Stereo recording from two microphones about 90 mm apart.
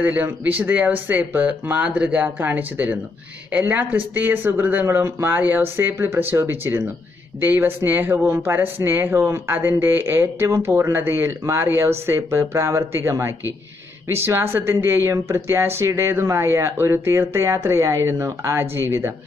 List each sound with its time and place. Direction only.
0.0 s speech: 20° right (ahead or behind)